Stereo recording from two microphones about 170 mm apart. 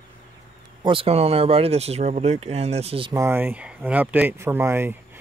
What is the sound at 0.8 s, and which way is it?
Speech, 35° right (ahead or behind).